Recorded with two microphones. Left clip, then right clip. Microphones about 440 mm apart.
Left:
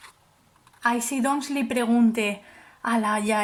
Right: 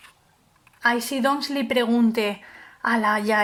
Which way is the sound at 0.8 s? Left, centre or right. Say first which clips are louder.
Right 3 dB; centre.